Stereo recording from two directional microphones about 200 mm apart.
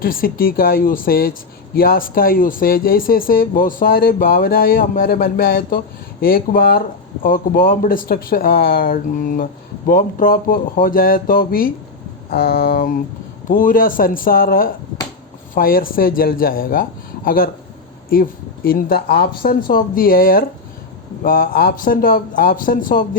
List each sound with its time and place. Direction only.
0.0 s speech: 45° left (ahead or behind)